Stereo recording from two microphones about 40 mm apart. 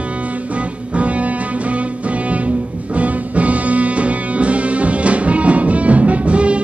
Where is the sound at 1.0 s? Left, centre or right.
Right.